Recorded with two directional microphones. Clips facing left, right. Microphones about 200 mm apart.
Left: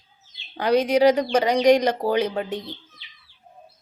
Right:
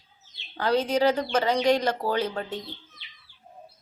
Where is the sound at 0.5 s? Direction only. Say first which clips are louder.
Left 5 dB; 15° left (ahead or behind).